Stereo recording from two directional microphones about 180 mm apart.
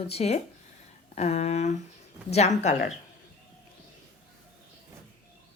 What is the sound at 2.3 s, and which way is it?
Speech, 40° left (ahead or behind).